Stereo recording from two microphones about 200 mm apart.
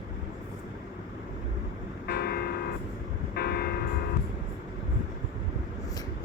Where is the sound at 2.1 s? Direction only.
50° left (ahead or behind).